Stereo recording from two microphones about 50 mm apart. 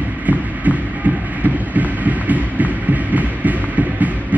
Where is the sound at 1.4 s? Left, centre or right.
Right.